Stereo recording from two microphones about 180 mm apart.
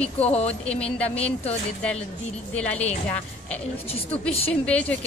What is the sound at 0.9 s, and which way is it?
Speech, 5° left (ahead or behind).